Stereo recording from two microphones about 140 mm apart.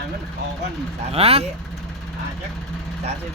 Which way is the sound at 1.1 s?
45° right (ahead or behind).